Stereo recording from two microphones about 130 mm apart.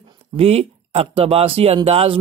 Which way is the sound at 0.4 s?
50° right (ahead or behind).